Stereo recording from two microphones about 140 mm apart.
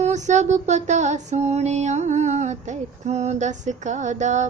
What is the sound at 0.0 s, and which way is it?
Female singing, 60° right (ahead or behind).